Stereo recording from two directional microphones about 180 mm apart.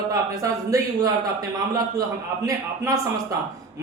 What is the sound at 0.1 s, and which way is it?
A man's voice, 20° right (ahead or behind).